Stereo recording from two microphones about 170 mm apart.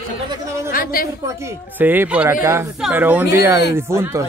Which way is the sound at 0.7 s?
60° left (ahead or behind).